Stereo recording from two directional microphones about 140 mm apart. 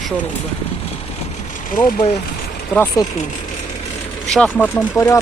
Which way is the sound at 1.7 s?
75° left (ahead or behind).